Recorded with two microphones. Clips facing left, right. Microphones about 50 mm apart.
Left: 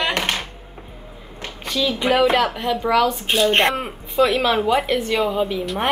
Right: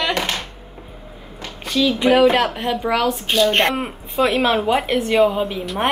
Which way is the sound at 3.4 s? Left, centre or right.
Left.